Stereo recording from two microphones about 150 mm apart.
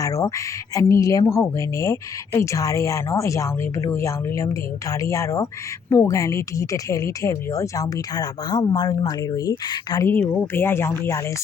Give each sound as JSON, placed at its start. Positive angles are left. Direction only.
{"t": 0.0, "sound": "speech", "side_deg": 20}
{"t": 10.2, "sound": "speech", "side_deg": 15}